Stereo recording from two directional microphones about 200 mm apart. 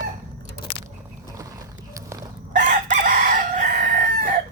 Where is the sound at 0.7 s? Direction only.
25° left (ahead or behind).